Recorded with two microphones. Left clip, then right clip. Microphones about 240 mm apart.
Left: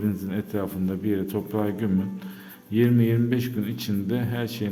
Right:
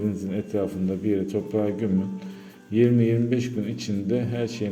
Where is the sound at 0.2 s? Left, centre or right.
Centre.